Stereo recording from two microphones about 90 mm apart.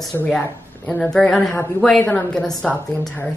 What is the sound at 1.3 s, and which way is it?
A woman's voice, 5° left (ahead or behind).